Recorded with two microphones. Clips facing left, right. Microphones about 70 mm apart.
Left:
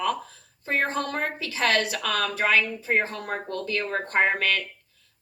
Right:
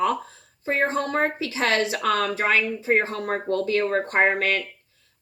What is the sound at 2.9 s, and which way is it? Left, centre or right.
Speech, right.